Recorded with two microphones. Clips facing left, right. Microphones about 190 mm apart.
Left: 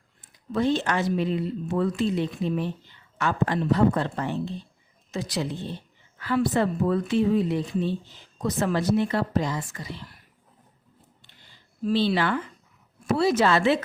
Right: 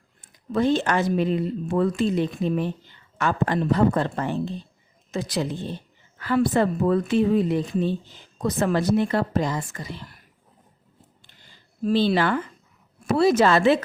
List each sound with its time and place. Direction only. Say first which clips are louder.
0.5 s speech: right 3 dB; 50° right (ahead or behind)
11.9 s speech: right 3 dB; 45° right (ahead or behind)